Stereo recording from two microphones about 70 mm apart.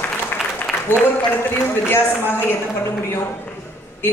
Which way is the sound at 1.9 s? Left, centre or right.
Left.